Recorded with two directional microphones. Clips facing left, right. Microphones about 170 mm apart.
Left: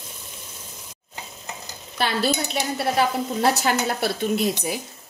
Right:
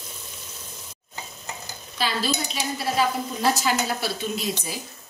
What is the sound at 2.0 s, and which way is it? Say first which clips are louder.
Speech: left 3 dB; 60° left (ahead or behind).